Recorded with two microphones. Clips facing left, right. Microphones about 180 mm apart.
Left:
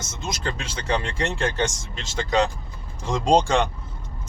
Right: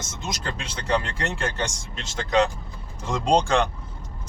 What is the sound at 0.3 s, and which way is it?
Speech, centre (ahead or behind).